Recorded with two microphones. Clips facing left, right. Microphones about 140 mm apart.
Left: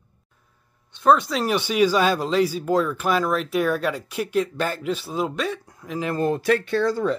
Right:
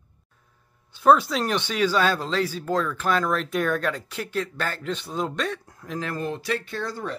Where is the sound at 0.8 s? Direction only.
5° right (ahead or behind).